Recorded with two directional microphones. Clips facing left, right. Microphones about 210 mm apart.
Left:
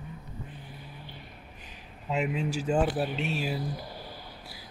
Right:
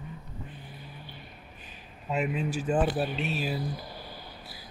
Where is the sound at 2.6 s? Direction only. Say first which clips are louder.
Even; 20° left (ahead or behind).